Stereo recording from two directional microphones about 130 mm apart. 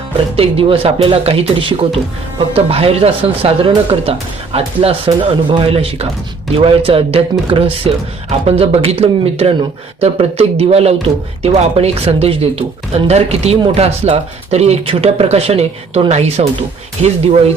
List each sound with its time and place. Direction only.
0.3 s speech: 45° right (ahead or behind)